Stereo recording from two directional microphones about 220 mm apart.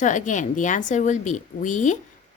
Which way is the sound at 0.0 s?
35° left (ahead or behind).